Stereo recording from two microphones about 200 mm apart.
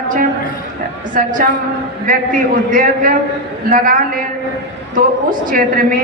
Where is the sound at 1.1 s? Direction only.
40° right (ahead or behind).